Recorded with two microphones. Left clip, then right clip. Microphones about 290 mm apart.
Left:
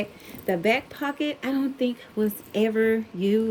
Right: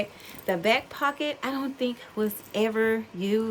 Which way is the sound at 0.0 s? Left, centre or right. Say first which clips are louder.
Left 1 dB; centre.